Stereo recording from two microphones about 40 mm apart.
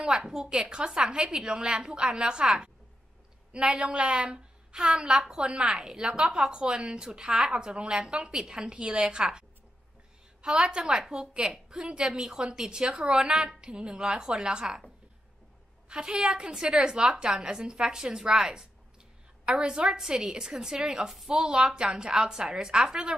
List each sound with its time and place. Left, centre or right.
0.1 s a woman's voice: centre
5.4 s a woman's voice: right
5.8 s a woman's voice: centre
10.4 s a woman's voice: centre
15.9 s a woman's voice: centre
21.3 s a woman's voice: centre